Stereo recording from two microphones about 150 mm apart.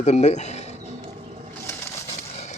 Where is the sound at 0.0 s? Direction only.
50° left (ahead or behind).